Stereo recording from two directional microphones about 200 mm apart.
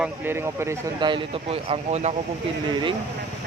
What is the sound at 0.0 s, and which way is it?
Speech, 10° right (ahead or behind).